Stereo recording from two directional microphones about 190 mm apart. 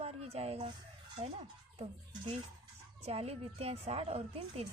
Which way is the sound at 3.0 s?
35° right (ahead or behind).